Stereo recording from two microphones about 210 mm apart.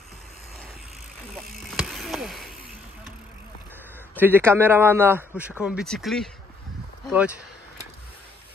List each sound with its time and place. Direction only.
1.3 s vehicle: centre (ahead or behind)
4.2 s a man's voice: 10° right (ahead or behind)